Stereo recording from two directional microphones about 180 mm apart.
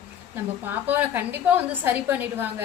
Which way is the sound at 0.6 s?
10° right (ahead or behind).